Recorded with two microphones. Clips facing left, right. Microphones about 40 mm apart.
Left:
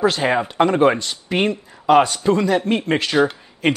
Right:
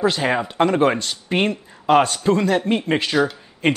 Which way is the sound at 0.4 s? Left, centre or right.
Centre.